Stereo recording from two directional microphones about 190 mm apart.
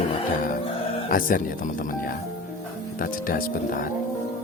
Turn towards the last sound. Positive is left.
turn(degrees=50)  # may be behind; listen again after turning